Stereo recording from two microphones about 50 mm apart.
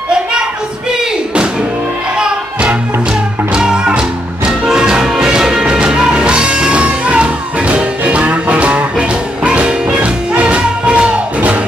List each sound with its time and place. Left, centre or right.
0.9 s music: centre